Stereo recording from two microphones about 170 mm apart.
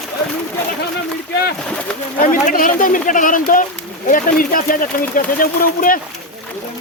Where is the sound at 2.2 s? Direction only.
50° left (ahead or behind).